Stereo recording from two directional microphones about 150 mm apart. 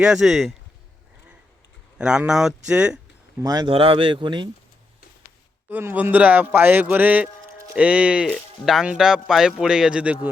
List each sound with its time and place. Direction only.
0.0 s speech: 5° right (ahead or behind)
2.0 s a man's voice: 5° right (ahead or behind)
3.4 s speech: 25° right (ahead or behind)
5.6 s a man's voice: 10° right (ahead or behind)